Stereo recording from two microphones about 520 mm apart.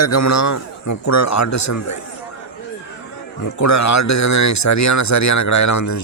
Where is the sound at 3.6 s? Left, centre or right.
Left.